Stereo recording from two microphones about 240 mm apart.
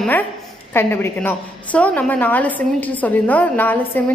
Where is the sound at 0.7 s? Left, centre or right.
Centre.